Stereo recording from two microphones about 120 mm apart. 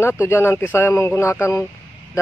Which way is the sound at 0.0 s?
20° left (ahead or behind).